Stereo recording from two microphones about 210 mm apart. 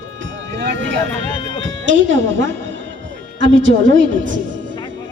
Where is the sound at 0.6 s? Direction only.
55° right (ahead or behind).